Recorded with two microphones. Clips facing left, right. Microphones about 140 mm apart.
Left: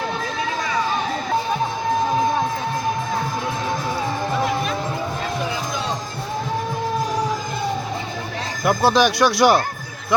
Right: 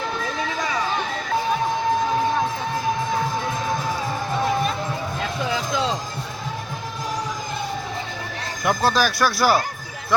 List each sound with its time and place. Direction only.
8.6 s speech: 10° left (ahead or behind)